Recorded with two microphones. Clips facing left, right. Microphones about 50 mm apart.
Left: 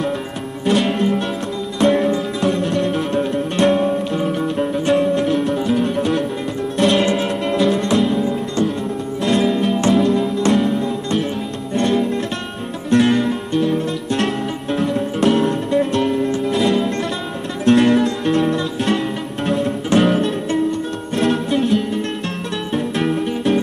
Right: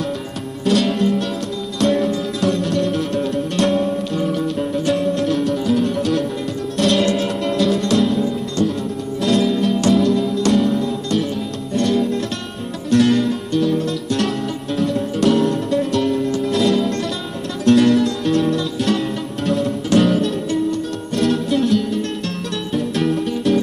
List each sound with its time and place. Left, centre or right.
0.7 s music: centre
9.7 s music: left
9.9 s music: centre
10.2 s music: left
10.5 s music: centre
13.5 s music: left; by 15.8 s centre
15.8 s music: left
16.4 s music: centre
19.9 s music: left
21.2 s music: centre
23.0 s music: centre